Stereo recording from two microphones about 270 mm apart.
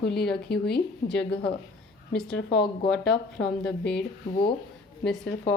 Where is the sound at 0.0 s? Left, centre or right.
Left.